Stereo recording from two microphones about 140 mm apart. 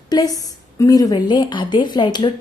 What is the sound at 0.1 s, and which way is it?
A woman's voice, 25° left (ahead or behind).